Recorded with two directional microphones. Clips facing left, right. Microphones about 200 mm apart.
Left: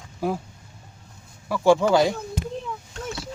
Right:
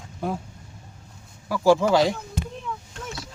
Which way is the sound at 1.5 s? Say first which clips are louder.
Left 1 dB; centre (ahead or behind).